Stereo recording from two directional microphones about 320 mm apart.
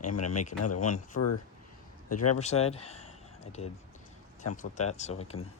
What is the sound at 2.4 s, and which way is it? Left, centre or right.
Speech, centre.